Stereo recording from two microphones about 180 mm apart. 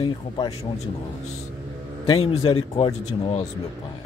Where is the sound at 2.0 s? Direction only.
30° left (ahead or behind).